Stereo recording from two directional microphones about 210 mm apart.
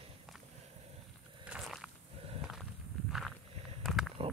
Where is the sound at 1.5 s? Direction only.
Centre (ahead or behind).